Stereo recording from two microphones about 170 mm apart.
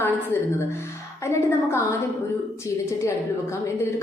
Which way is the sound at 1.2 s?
15° left (ahead or behind).